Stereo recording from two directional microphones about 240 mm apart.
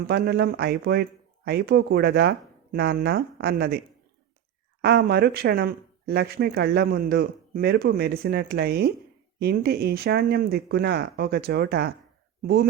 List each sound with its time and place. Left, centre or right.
0.1 s speech: right
4.8 s speech: right